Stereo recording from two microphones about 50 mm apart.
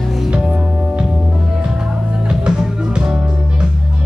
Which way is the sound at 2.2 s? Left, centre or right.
Centre.